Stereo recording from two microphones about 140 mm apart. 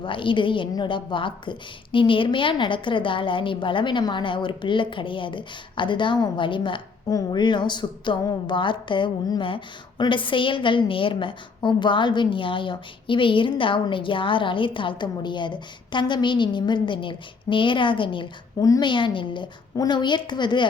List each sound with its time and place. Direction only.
0.0 s a woman's voice: 35° left (ahead or behind)